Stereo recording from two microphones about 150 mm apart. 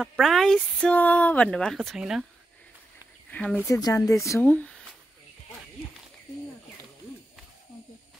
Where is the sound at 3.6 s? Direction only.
20° left (ahead or behind).